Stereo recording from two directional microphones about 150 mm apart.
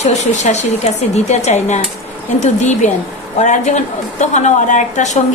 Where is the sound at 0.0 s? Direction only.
50° left (ahead or behind).